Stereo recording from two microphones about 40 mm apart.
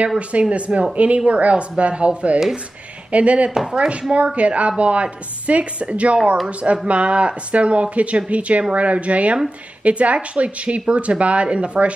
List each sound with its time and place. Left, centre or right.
0.2 s a woman's voice: right
3.5 s speech: centre
4.4 s a woman's voice: right